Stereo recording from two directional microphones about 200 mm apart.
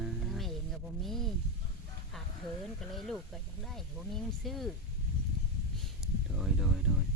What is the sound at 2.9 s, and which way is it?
Speech, centre (ahead or behind).